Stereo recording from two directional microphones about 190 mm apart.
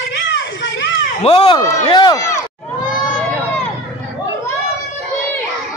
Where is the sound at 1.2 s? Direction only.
30° left (ahead or behind).